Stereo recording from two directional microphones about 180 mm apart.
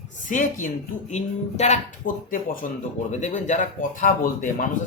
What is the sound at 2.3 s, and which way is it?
Speech, 50° left (ahead or behind).